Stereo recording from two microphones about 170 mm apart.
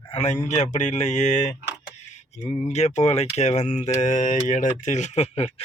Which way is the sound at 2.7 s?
40° left (ahead or behind).